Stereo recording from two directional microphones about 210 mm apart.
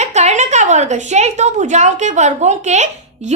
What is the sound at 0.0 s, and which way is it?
A woman's voice, 35° right (ahead or behind).